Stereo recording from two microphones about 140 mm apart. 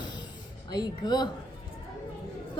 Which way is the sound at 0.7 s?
30° left (ahead or behind).